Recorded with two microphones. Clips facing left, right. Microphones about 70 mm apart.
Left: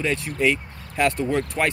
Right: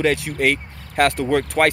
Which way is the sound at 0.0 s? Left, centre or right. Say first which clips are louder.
Right 3 dB; right.